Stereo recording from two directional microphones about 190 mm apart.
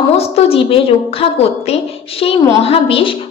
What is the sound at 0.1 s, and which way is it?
A woman's voice, 30° left (ahead or behind).